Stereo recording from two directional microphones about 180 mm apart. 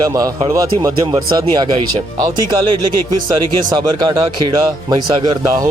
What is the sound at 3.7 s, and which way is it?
Speech, 25° right (ahead or behind).